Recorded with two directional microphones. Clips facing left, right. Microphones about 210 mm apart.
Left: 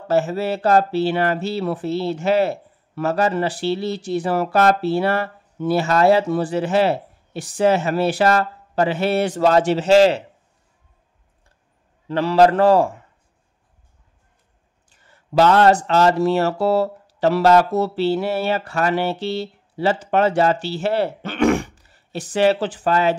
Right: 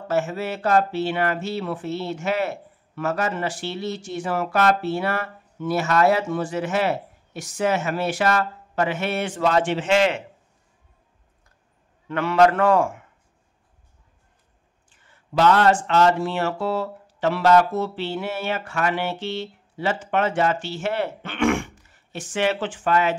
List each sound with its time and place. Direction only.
0.1 s speech: 35° left (ahead or behind)
12.1 s speech: 35° left (ahead or behind)
14.9 s speech: 40° left (ahead or behind)